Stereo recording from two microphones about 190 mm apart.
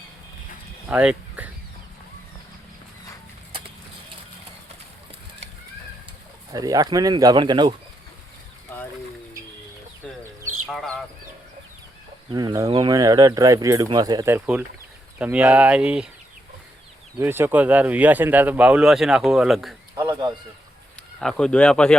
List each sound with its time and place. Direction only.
0.9 s speech: 5° right (ahead or behind)
6.5 s speech: 20° right (ahead or behind)
10.7 s speech: 5° left (ahead or behind)
12.3 s speech: 20° right (ahead or behind); by 16.0 s 5° right (ahead or behind)
17.2 s speech: 10° right (ahead or behind)
20.0 s speech: 20° right (ahead or behind)
21.2 s speech: 5° left (ahead or behind)